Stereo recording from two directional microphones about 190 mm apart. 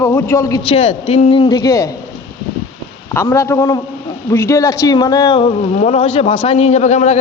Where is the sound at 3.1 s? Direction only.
15° left (ahead or behind).